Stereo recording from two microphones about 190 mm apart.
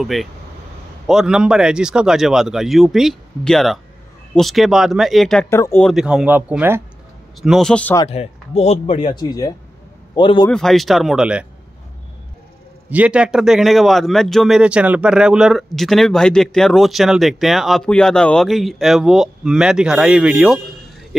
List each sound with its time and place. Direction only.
0.0 s speech: centre (ahead or behind)
7.4 s speech: centre (ahead or behind)
8.0 s speech: 30° left (ahead or behind)
10.5 s speech: centre (ahead or behind)
12.9 s speech: 5° right (ahead or behind)